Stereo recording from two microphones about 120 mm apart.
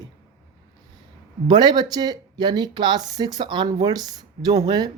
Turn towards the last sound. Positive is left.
turn(degrees=-35)  # may be behind; listen again after turning